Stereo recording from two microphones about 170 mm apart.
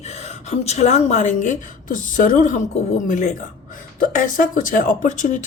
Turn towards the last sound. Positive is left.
turn(degrees=45)  # may be behind; listen again after turning